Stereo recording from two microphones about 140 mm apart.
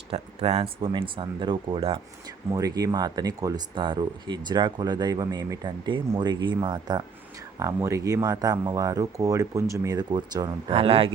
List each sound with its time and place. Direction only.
0.1 s speech: 45° right (ahead or behind)
2.5 s speech: 25° right (ahead or behind)
10.7 s speech: 45° right (ahead or behind)